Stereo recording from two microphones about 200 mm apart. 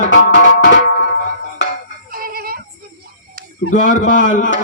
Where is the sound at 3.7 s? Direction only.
40° left (ahead or behind).